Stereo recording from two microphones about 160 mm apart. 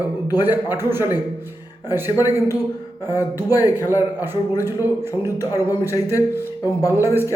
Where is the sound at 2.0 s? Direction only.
20° left (ahead or behind).